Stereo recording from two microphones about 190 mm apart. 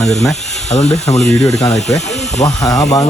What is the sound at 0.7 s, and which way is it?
Speech, 35° left (ahead or behind).